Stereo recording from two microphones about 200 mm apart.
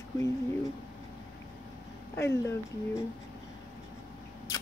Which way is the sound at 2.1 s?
10° left (ahead or behind).